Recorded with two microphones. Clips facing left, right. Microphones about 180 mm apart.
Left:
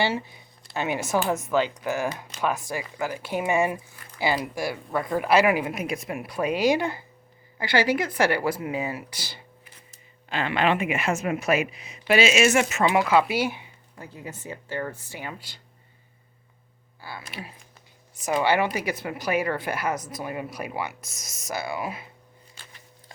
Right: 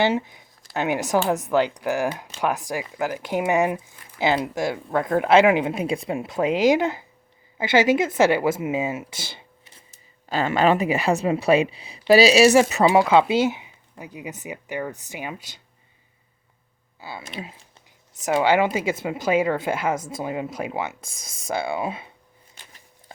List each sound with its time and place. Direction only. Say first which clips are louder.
0.0 s a woman's voice: right 5 dB; 20° right (ahead or behind)
10.2 s a woman's voice: right 4 dB; 40° right (ahead or behind); by 15.6 s 20° right (ahead or behind)
17.0 s speech: right 4 dB; 20° right (ahead or behind)